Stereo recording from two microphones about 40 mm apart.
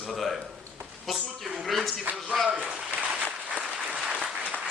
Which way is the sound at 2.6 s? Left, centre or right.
Right.